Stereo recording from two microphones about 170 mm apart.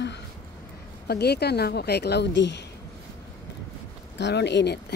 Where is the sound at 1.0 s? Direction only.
70° left (ahead or behind); by 2.6 s 90° left.